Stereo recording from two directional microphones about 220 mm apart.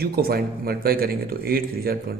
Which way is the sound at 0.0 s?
45° right (ahead or behind).